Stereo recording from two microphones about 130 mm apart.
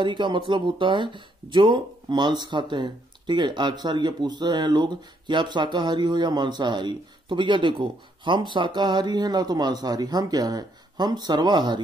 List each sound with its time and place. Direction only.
0.0 s speech: 35° right (ahead or behind)